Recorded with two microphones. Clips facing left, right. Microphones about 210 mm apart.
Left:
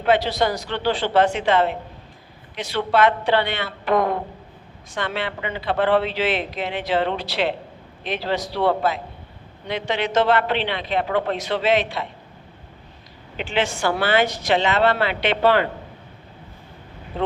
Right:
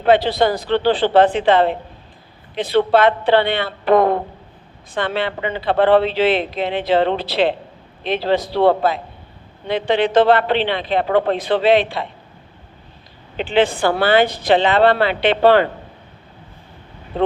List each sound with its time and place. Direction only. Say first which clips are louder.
0.0 s a woman's voice: right 5 dB; 30° right (ahead or behind)
13.3 s a woman's voice: right 7 dB; 30° right (ahead or behind)